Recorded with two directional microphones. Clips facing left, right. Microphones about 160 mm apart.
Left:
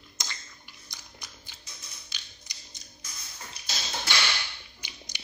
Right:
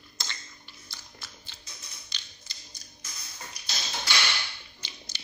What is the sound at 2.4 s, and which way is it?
Music, 15° left (ahead or behind).